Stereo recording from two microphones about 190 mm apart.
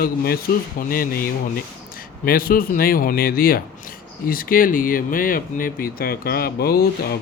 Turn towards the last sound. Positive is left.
turn(degrees=55)  # may be behind; listen again after turning